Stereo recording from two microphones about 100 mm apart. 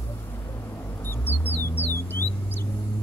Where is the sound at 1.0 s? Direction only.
20° left (ahead or behind).